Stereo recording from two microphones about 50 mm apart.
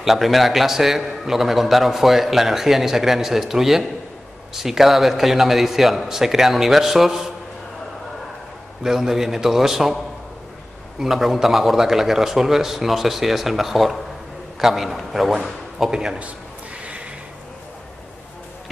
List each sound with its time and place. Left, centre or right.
0.0 s a man's voice: centre
8.8 s a man's voice: centre
11.0 s a man's voice: centre
16.8 s a sound: right